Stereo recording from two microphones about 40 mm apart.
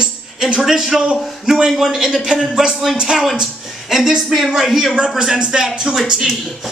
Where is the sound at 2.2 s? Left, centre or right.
Centre.